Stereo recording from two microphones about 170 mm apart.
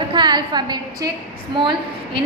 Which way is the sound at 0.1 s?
25° right (ahead or behind).